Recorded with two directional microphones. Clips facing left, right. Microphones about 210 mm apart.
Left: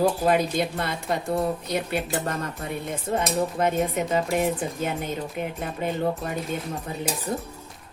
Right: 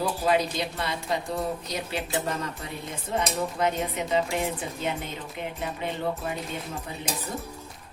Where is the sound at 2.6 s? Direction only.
55° left (ahead or behind).